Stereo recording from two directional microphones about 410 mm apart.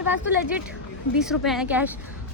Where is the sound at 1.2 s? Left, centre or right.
Centre.